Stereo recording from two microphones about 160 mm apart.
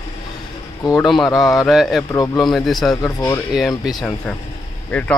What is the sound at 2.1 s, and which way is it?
Speech, 20° left (ahead or behind).